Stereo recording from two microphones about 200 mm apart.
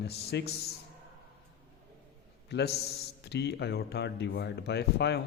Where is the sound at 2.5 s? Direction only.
55° left (ahead or behind).